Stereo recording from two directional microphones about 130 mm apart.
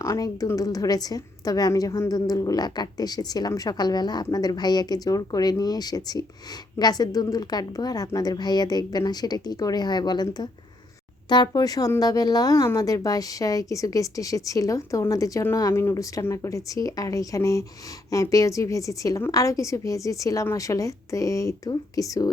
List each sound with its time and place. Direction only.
0.0 s a woman's voice: 25° left (ahead or behind)